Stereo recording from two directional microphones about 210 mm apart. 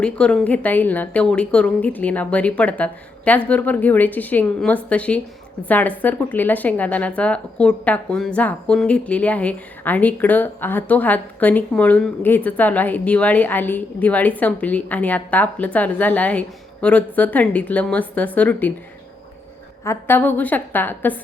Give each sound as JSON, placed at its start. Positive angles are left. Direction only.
{"t": 0.0, "sound": "speech", "side_deg": 5}
{"t": 19.8, "sound": "speech", "side_deg": 10}